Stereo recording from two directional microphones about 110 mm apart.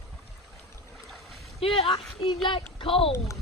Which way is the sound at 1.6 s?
55° left (ahead or behind).